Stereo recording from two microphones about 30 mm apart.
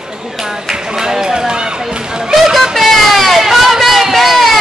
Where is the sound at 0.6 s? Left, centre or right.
Centre.